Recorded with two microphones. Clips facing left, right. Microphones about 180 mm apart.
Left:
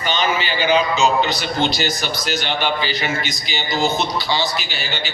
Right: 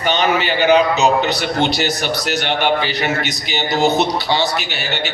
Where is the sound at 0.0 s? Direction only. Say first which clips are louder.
Right 4 dB; 60° right (ahead or behind).